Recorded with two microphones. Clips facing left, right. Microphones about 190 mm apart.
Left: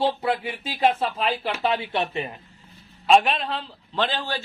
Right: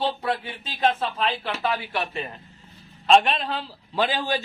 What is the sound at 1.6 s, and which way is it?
Speech, 25° left (ahead or behind).